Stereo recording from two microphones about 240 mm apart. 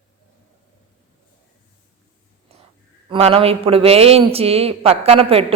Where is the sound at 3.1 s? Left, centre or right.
Right.